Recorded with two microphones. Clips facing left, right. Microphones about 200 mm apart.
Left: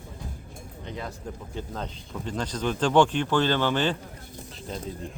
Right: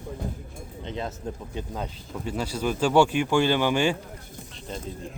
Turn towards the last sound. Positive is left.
turn(degrees=0)  # may be behind; listen again after turning